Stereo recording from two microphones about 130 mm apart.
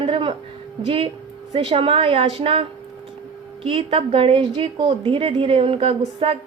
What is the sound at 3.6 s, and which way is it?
A woman's voice, 45° right (ahead or behind).